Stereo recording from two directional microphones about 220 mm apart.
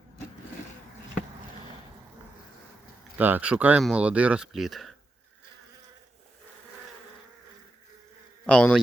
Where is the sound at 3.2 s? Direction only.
10° right (ahead or behind).